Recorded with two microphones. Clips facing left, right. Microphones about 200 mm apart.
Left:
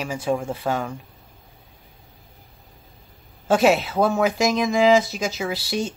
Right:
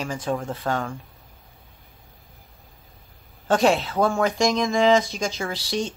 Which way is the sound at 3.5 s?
5° left (ahead or behind).